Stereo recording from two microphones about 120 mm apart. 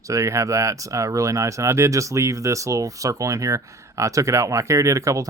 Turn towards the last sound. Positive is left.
turn(degrees=-25)  # may be behind; listen again after turning